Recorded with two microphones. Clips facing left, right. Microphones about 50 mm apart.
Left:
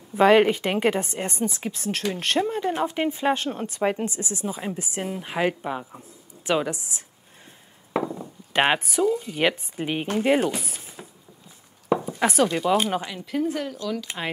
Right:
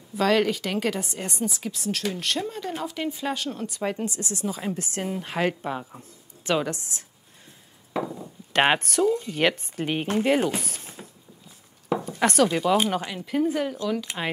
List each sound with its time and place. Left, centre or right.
0.1 s speech: left
4.6 s speech: centre
7.9 s chop: left
8.6 s speech: centre
10.6 s a sound: centre
11.9 s speech: centre
14.0 s speech: centre